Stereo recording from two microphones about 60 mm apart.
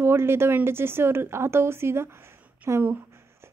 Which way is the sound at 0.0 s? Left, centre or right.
Right.